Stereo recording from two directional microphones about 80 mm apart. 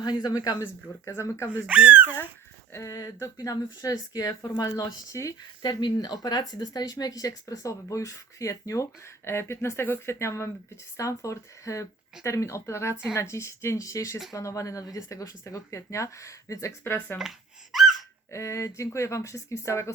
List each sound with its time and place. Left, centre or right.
0.0 s speech: left
0.6 s speech: left
1.6 s speech: centre
2.7 s speech: left
16.8 s speech: left
17.2 s gasp: centre
18.3 s speech: left